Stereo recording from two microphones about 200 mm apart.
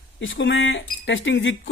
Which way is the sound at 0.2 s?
65° left (ahead or behind).